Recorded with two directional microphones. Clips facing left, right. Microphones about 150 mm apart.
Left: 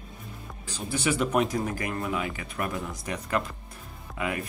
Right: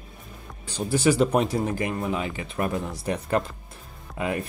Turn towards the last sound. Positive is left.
turn(degrees=-30)  # may be behind; listen again after turning